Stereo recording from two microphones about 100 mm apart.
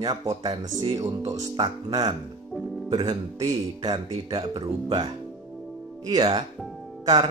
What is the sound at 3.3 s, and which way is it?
A man's voice, 40° right (ahead or behind).